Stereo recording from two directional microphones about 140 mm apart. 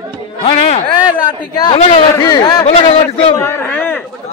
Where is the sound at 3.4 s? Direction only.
15° left (ahead or behind).